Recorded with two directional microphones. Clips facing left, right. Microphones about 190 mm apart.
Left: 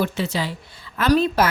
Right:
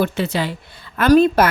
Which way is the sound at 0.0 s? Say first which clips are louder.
Right 3 dB; 60° right (ahead or behind).